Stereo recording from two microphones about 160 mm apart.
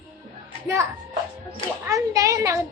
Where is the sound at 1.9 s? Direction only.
20° right (ahead or behind).